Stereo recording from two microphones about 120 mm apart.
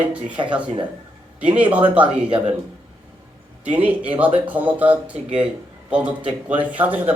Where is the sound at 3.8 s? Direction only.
10° right (ahead or behind).